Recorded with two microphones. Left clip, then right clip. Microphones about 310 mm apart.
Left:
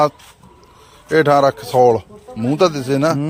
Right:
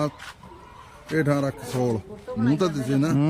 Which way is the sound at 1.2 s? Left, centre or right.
Centre.